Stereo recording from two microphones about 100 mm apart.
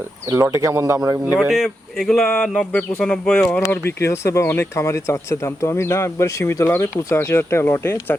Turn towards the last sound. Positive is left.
turn(degrees=20)  # may be behind; listen again after turning